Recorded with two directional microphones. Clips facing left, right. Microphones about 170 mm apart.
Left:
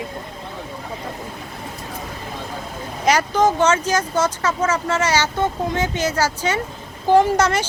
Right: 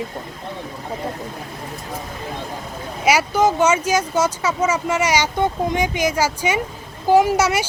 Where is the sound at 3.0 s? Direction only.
10° right (ahead or behind).